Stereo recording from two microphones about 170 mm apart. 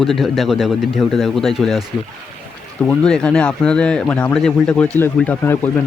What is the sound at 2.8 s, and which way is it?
Speech, 5° left (ahead or behind).